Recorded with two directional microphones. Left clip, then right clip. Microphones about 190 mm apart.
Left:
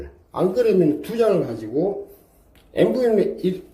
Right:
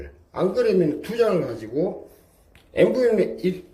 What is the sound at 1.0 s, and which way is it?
Speech, 25° left (ahead or behind).